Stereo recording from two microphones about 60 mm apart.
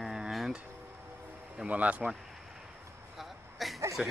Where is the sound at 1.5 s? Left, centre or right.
Right.